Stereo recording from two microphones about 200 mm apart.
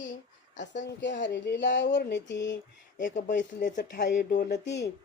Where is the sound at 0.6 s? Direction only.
65° left (ahead or behind).